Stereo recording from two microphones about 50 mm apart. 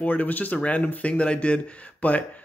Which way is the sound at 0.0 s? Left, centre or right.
Left.